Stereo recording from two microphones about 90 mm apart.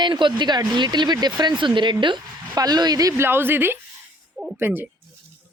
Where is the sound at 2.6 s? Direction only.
50° right (ahead or behind).